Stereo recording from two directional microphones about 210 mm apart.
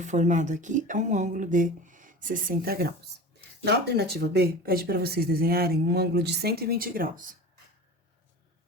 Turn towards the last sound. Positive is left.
turn(degrees=-40)  # may be behind; listen again after turning